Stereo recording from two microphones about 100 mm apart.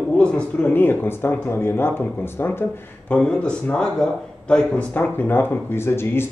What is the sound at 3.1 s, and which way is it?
Speech, 10° left (ahead or behind).